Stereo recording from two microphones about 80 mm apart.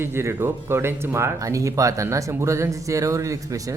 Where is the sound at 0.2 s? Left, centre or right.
Right.